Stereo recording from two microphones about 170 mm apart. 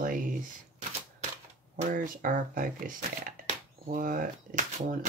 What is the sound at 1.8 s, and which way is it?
Speech, 50° right (ahead or behind).